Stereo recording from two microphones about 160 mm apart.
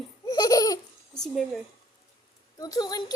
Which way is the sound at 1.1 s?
5° left (ahead or behind).